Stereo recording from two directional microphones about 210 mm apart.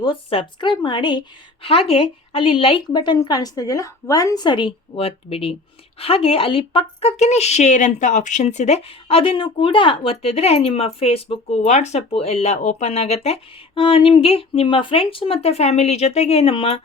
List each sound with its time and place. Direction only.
0.0 s a woman's voice: 25° left (ahead or behind)